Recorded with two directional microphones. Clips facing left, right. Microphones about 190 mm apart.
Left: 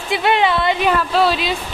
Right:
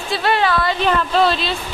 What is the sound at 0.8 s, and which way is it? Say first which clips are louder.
Speech: right 1 dB; 5° left (ahead or behind).